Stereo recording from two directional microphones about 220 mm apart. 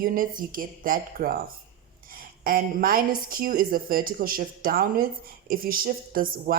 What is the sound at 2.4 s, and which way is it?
Speech, 40° right (ahead or behind).